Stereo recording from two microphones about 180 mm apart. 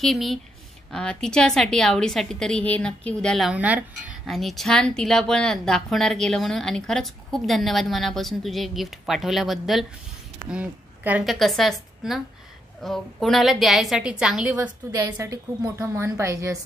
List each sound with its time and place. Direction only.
0.0 s a woman's voice: centre (ahead or behind)
15.0 s a woman's voice: 20° right (ahead or behind)